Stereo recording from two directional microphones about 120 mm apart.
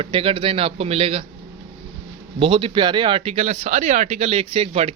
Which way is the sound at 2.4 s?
45° right (ahead or behind).